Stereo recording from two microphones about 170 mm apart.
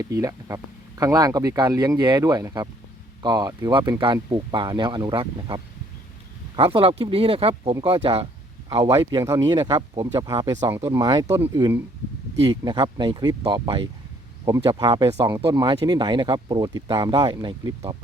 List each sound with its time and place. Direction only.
0.0 s speech: 20° right (ahead or behind); by 8.3 s 35° right (ahead or behind)
8.7 s speech: 20° right (ahead or behind)